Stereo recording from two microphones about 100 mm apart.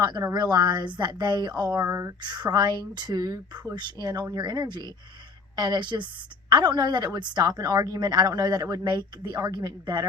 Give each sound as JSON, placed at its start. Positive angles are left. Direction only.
{"t": 0.0, "sound": "speech", "side_deg": -45}